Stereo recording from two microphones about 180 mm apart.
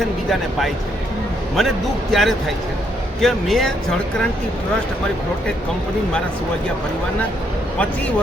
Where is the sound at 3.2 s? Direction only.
Centre (ahead or behind).